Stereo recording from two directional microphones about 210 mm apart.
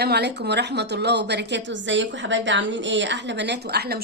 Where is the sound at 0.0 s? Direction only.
50° right (ahead or behind).